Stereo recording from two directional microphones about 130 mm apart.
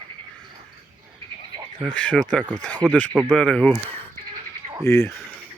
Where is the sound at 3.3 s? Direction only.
5° left (ahead or behind).